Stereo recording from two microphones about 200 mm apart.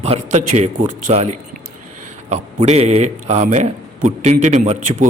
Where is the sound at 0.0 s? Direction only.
35° right (ahead or behind).